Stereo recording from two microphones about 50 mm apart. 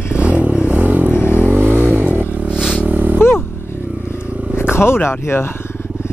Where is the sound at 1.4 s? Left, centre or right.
Right.